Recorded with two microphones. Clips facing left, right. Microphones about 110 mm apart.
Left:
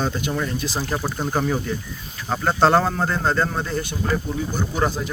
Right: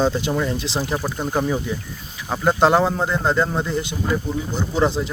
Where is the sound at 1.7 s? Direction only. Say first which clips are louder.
Even; 15° right (ahead or behind).